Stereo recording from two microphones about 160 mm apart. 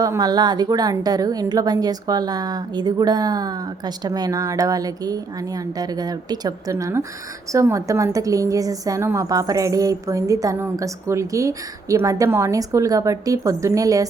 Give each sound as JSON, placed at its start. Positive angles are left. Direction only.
{"t": 0.0, "sound": "a woman's voice", "side_deg": -25}